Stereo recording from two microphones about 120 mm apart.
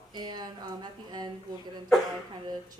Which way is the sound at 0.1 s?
35° right (ahead or behind).